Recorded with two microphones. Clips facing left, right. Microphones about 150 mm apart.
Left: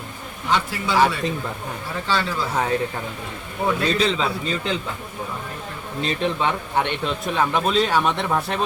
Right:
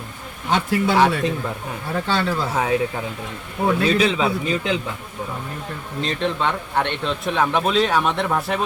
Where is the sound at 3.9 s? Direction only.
10° right (ahead or behind).